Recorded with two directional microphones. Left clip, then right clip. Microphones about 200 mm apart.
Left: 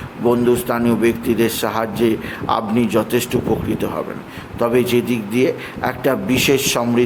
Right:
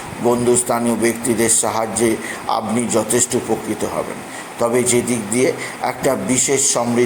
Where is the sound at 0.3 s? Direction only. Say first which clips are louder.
Even; 20° left (ahead or behind).